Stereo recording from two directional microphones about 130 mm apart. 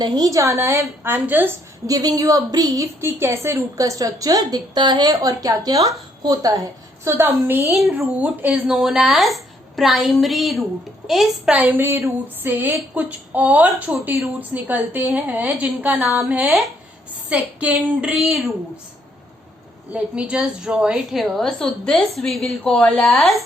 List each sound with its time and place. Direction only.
0.0 s a woman's voice: 30° right (ahead or behind)
1.9 s a woman's voice: 30° right (ahead or behind)
7.1 s a woman's voice: 15° right (ahead or behind); by 18.5 s centre (ahead or behind)
19.9 s speech: 10° right (ahead or behind)